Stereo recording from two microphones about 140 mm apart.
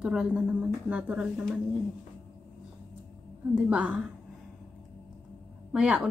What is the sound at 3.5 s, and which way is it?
Speech, 10° right (ahead or behind).